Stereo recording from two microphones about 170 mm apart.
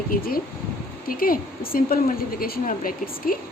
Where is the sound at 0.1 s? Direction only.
60° left (ahead or behind).